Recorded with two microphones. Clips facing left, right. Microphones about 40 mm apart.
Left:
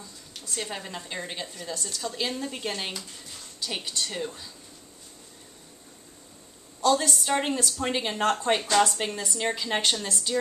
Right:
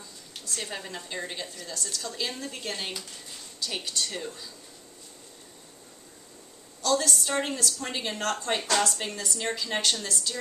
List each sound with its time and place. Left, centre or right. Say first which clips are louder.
0.6 s a woman's voice: left 2 dB; centre
6.8 s a woman's voice: left 3 dB; centre